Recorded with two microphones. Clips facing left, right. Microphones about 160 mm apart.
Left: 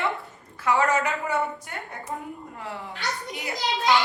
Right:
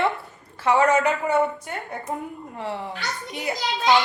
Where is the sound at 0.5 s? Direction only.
25° right (ahead or behind).